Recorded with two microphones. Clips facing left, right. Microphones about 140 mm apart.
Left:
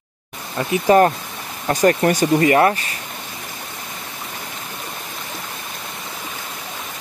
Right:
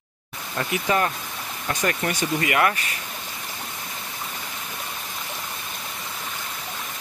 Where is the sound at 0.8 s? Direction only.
40° left (ahead or behind).